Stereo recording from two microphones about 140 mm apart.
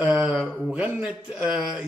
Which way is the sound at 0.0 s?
10° right (ahead or behind).